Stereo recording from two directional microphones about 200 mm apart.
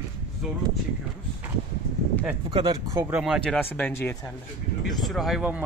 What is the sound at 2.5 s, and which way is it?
Speech, 25° right (ahead or behind).